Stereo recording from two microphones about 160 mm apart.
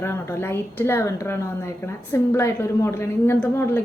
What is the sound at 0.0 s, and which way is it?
A woman's voice, 15° left (ahead or behind).